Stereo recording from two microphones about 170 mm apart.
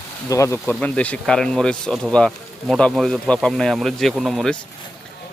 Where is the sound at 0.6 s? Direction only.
5° left (ahead or behind).